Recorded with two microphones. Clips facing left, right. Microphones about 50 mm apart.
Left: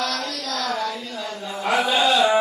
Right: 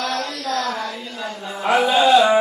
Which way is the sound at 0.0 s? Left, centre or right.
Right.